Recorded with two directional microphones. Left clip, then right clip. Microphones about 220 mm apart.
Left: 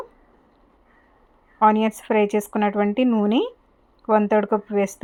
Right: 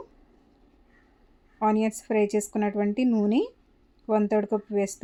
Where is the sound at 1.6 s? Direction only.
10° left (ahead or behind).